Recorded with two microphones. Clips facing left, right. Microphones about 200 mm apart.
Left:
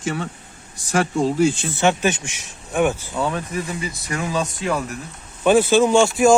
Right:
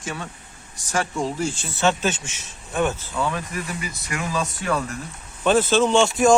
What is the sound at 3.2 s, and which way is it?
Speech, 25° left (ahead or behind).